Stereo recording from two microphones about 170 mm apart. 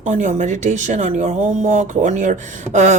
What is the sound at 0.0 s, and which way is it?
Speech, 45° right (ahead or behind).